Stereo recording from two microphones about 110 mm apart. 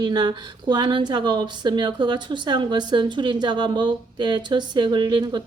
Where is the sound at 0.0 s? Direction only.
40° right (ahead or behind).